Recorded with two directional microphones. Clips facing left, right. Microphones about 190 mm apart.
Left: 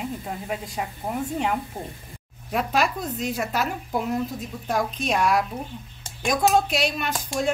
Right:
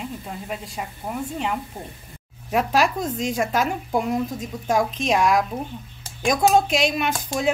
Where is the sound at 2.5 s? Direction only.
Centre (ahead or behind).